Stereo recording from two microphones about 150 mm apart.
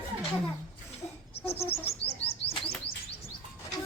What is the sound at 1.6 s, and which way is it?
Bird, 40° left (ahead or behind).